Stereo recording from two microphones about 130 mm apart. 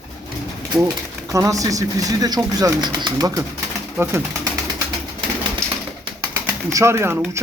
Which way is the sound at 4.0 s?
20° right (ahead or behind).